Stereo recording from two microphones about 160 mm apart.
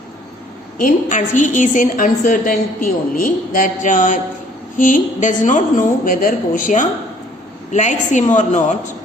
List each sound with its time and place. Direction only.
0.8 s a woman's voice: 55° left (ahead or behind)